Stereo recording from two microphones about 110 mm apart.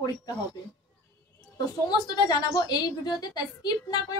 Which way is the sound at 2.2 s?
35° left (ahead or behind).